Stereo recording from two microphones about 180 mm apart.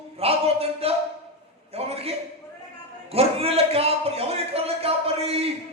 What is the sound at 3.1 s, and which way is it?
Speech, 35° right (ahead or behind).